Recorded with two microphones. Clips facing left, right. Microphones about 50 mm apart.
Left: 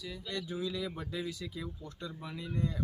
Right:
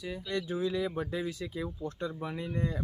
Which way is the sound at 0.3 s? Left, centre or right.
Right.